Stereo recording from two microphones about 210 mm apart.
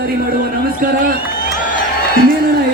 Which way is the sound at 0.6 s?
45° right (ahead or behind).